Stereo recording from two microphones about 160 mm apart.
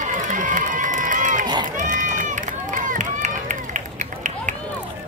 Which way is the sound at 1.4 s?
25° right (ahead or behind).